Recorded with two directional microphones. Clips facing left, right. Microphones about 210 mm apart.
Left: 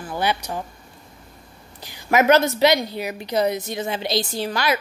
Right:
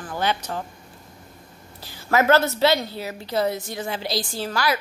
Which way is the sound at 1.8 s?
15° left (ahead or behind).